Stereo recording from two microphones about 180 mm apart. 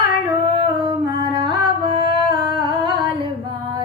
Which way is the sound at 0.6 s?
25° right (ahead or behind).